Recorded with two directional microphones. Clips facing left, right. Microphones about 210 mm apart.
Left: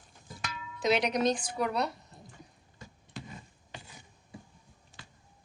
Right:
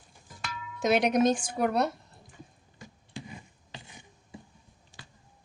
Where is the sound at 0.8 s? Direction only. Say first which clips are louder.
Right 4 dB; 50° right (ahead or behind).